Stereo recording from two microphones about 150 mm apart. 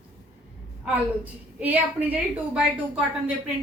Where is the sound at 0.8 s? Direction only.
10° right (ahead or behind).